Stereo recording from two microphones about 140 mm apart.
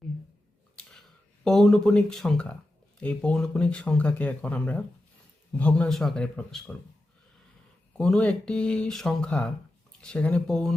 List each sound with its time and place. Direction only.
0.8 s a sound: 5° left (ahead or behind)
1.5 s speech: centre (ahead or behind)
7.9 s speech: 5° left (ahead or behind)